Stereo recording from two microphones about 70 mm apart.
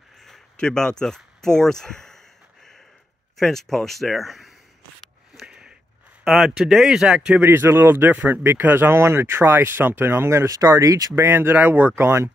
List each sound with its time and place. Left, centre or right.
0.2 s a sound: centre
3.3 s speech: centre
5.5 s a sound: centre
6.2 s speech: centre
7.3 s speech: right
10.5 s speech: right
11.1 s speech: right
11.9 s speech: right